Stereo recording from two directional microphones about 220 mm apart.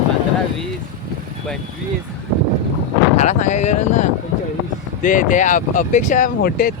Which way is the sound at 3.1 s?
30° left (ahead or behind).